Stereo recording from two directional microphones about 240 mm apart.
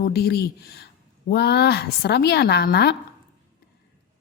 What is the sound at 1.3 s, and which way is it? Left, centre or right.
A woman's voice, left.